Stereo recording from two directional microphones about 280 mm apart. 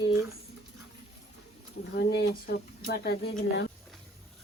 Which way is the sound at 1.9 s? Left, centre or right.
Left.